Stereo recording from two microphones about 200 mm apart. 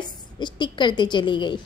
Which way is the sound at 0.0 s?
20° left (ahead or behind).